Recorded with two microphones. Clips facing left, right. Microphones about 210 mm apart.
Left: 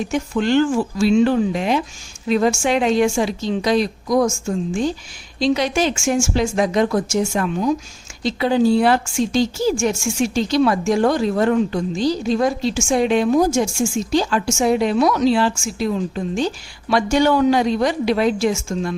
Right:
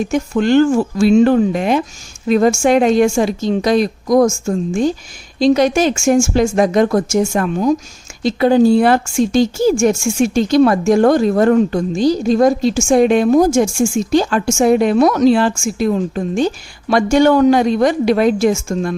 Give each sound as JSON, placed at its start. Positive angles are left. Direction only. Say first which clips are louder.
{"t": 0.1, "sound": "a woman's voice", "louder": "right 4 dB", "side_deg": -45}